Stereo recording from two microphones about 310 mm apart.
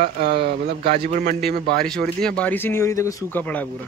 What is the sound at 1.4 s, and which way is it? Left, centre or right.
Speech, centre.